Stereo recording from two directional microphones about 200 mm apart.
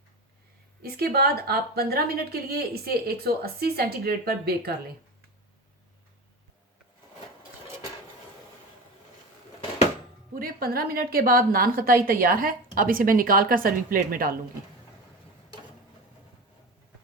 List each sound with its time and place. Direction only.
0.8 s a woman's voice: 50° right (ahead or behind)
10.3 s a woman's voice: 45° right (ahead or behind)